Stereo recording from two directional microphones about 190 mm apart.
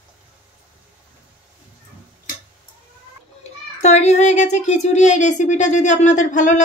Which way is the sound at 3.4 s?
35° left (ahead or behind).